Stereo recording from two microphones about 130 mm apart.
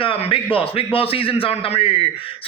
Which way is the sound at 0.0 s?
45° left (ahead or behind).